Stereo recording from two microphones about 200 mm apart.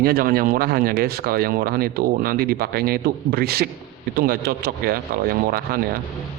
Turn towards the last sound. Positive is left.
turn(degrees=-50)  # may be behind; listen again after turning